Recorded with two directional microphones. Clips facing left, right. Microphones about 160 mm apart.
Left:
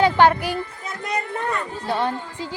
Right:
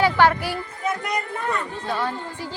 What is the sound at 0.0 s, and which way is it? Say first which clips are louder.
Speech: left 2 dB; 20° left (ahead or behind).